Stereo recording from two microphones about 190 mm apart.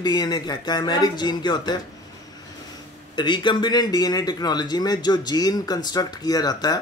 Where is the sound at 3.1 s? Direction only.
25° left (ahead or behind).